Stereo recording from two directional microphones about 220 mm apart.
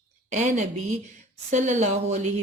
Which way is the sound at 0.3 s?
35° right (ahead or behind).